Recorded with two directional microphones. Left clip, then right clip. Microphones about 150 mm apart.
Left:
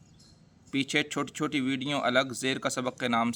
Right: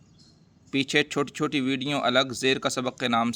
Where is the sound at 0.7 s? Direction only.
30° right (ahead or behind).